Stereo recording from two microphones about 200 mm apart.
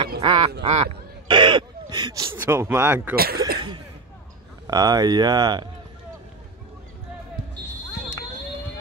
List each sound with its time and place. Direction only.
0.2 s speech: 25° right (ahead or behind)
3.2 s speech: 50° right (ahead or behind)
3.5 s a sound: 25° right (ahead or behind)
4.6 s speech: 20° right (ahead or behind)